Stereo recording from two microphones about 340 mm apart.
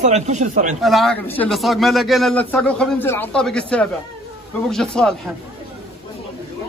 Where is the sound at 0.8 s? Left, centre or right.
Centre.